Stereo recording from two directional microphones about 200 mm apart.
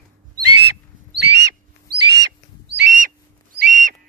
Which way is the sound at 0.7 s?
55° right (ahead or behind).